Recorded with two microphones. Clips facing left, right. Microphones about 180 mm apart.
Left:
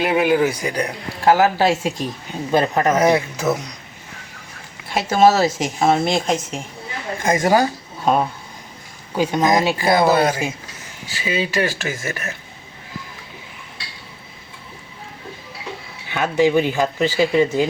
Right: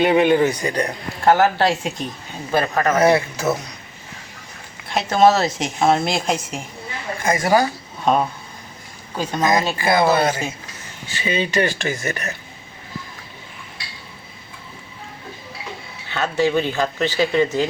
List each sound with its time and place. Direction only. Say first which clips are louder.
0.0 s a man's voice: right 2 dB; 5° left (ahead or behind)
2.5 s a man's voice: left 2 dB; 20° left (ahead or behind)
4.9 s speech: left 1 dB; 5° left (ahead or behind)
7.3 s a man's voice: left 1 dB; 20° left (ahead or behind)
8.0 s a man's voice: even; 5° left (ahead or behind)
16.0 s a man's voice: left 3 dB; 15° left (ahead or behind)